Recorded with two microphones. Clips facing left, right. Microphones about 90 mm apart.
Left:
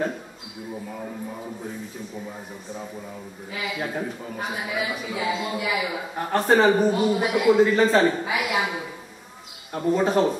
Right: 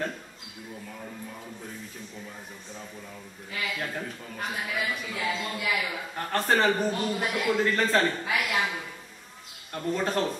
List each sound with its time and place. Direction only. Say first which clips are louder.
0.9 s music: left 7 dB; 20° left (ahead or behind)
3.5 s speech: left 4 dB; 10° left (ahead or behind)